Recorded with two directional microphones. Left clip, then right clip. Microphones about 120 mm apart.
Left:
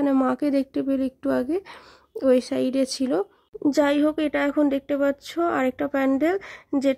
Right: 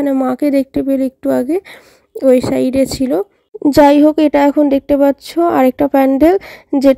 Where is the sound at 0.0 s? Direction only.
40° right (ahead or behind).